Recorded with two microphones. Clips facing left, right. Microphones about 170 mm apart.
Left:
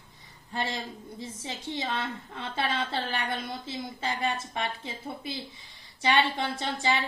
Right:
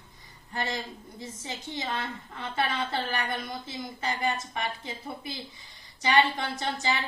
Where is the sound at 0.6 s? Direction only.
25° left (ahead or behind).